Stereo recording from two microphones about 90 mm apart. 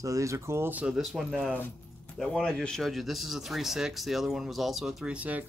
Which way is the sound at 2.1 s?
5° left (ahead or behind).